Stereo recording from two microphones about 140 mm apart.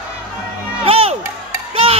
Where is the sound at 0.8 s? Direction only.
40° right (ahead or behind).